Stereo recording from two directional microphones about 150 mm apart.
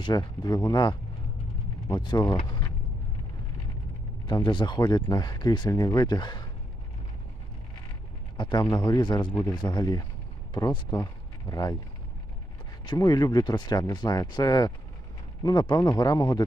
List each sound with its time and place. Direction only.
0.0 s speech: 30° left (ahead or behind)
4.3 s speech: 30° left (ahead or behind)
8.4 s speech: 30° left (ahead or behind)
12.8 s speech: 25° left (ahead or behind)